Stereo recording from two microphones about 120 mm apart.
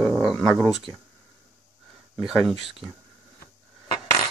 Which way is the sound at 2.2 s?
5° right (ahead or behind).